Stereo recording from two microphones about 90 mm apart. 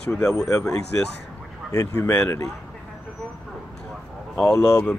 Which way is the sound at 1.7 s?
40° left (ahead or behind).